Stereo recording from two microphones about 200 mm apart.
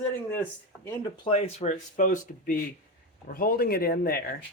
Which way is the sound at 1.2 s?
30° left (ahead or behind).